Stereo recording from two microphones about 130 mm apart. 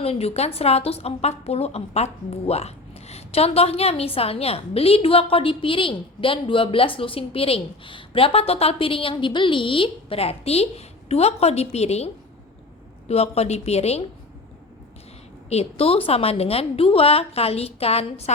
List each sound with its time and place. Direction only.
0.0 s a woman's voice: 50° left (ahead or behind)
15.4 s a woman's voice: 50° left (ahead or behind)